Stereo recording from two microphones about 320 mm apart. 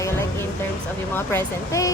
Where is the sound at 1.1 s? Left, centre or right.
Centre.